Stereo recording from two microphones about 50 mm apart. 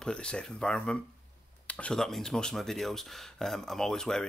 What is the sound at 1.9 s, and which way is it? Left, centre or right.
Speech, centre.